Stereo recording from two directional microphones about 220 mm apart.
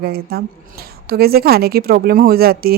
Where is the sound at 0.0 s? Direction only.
45° right (ahead or behind).